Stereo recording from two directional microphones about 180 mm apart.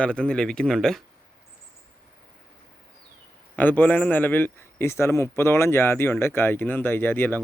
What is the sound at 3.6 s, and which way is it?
A man's voice, 10° left (ahead or behind).